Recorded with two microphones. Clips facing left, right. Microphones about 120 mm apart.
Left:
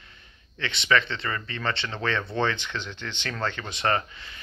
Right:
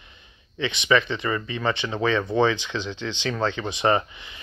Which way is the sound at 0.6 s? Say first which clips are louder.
Right 3 dB; 15° right (ahead or behind).